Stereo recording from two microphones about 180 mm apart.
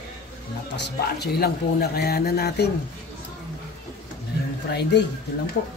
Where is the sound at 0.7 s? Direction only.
65° left (ahead or behind).